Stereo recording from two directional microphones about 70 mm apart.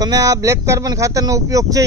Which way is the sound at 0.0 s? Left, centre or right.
Right.